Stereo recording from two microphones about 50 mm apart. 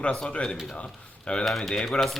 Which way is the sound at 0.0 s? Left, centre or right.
Left.